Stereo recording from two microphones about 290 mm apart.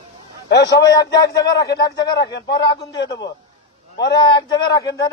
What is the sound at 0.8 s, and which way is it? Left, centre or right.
Speech, centre.